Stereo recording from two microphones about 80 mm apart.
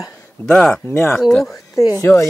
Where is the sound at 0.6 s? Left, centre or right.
Centre.